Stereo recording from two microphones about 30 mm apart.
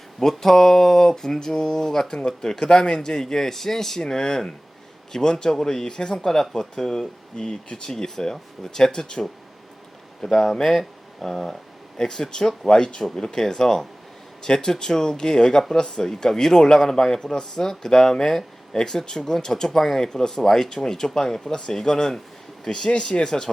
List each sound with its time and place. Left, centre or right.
0.2 s a man's voice: centre
6.2 s a man's voice: centre
10.2 s speech: centre
13.0 s a man's voice: centre